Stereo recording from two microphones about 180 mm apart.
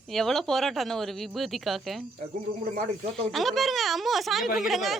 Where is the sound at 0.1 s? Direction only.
Centre (ahead or behind).